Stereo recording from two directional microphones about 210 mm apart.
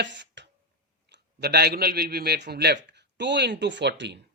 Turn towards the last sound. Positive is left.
turn(degrees=-55)  # may be behind; listen again after turning